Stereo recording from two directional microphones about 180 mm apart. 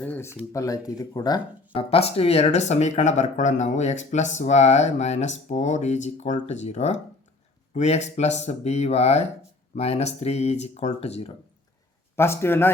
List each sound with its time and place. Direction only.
0.0 s speech: 10° left (ahead or behind); by 11.3 s 35° left (ahead or behind)
12.1 s a man's voice: 15° left (ahead or behind)